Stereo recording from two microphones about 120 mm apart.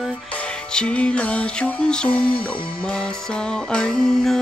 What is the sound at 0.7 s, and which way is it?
Music, 10° left (ahead or behind).